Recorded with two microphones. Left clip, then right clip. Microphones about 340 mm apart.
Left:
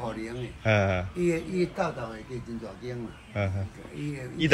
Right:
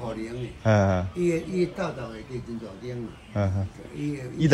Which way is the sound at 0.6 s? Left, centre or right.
Left.